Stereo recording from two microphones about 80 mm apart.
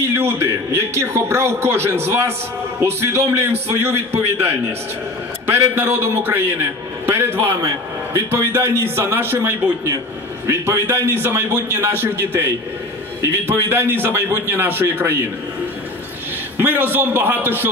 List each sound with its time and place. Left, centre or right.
0.1 s a man's voice: right
7.6 s a man's voice: right
16.5 s a man's voice: right